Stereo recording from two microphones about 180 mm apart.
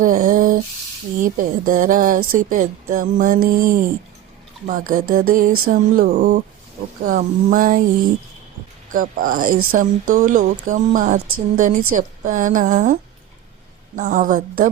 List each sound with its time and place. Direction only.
0.0 s a sound: 50° right (ahead or behind)
1.2 s speech: 50° right (ahead or behind)
8.9 s speech: 50° right (ahead or behind)